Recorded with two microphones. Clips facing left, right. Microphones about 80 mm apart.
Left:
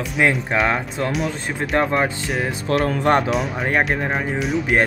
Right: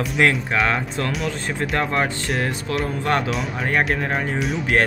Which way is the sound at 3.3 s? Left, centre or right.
Centre.